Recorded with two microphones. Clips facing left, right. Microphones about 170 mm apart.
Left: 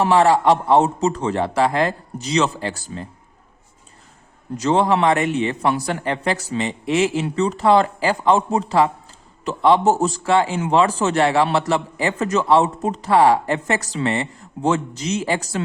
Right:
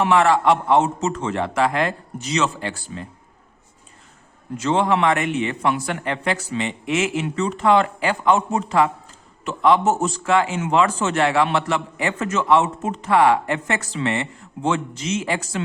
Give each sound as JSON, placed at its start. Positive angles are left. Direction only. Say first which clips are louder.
{"t": 0.0, "sound": "a man's voice", "louder": "left 2 dB", "side_deg": 35}
{"t": 4.5, "sound": "a man's voice", "louder": "left 2 dB", "side_deg": 35}